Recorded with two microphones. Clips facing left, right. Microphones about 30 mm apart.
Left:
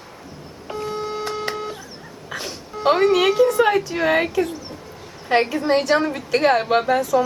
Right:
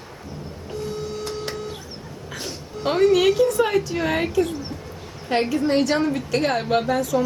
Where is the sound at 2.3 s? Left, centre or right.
Centre.